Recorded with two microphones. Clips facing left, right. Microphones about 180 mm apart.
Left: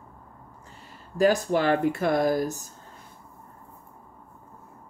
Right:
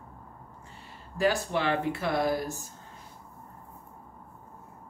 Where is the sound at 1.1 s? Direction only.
45° left (ahead or behind).